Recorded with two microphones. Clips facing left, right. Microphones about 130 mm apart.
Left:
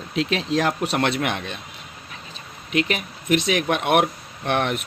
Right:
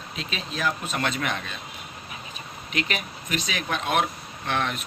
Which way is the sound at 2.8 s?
45° left (ahead or behind).